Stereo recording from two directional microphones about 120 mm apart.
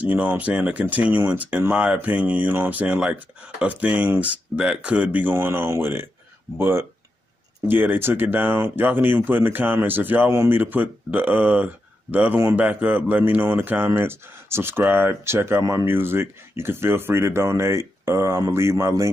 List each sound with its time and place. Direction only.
0.0 s speech: 15° right (ahead or behind)